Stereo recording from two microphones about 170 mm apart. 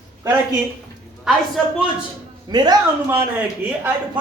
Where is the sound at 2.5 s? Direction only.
25° right (ahead or behind).